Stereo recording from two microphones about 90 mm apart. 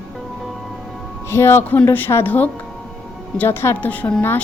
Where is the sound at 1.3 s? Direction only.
30° left (ahead or behind).